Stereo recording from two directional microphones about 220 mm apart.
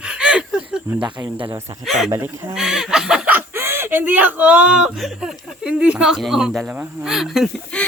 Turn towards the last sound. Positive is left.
turn(degrees=0)  # may be behind; listen again after turning